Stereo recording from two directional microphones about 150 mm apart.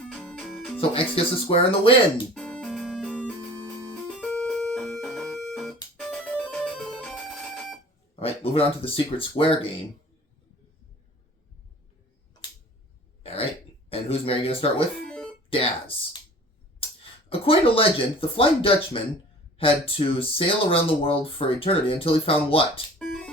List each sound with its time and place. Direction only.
0.1 s music: 5° left (ahead or behind)
0.8 s speech: 40° left (ahead or behind)
2.3 s music: 5° left (ahead or behind)
8.2 s speech: 40° left (ahead or behind)
13.2 s throat clearing: 40° left (ahead or behind)
13.9 s speech: 40° left (ahead or behind)
15.0 s music: 5° left (ahead or behind)
15.4 s speech: 40° left (ahead or behind)
17.0 s speech: 40° left (ahead or behind)
23.0 s music: 5° left (ahead or behind)